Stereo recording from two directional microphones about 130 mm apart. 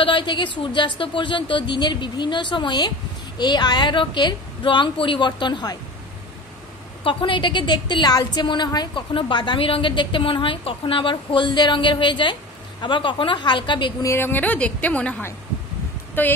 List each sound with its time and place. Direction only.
0.0 s a woman's voice: 40° left (ahead or behind)
7.0 s a woman's voice: 40° left (ahead or behind)
14.0 s a woman's voice: 15° left (ahead or behind)